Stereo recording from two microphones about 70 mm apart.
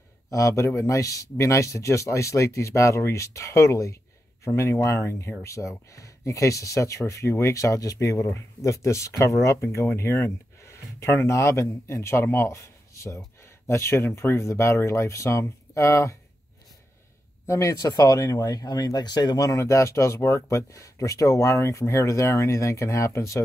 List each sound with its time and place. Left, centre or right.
0.3 s speech: left
17.5 s speech: left
17.7 s speech: left
19.6 s speech: left